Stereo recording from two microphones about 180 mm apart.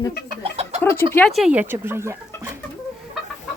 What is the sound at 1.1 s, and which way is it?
Speech, 5° left (ahead or behind).